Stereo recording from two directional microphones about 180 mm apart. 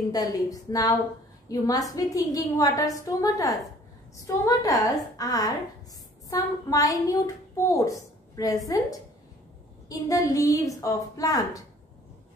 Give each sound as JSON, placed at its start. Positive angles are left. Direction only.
{"t": 0.1, "sound": "a woman's voice", "side_deg": 20}
{"t": 9.8, "sound": "a woman's voice", "side_deg": 20}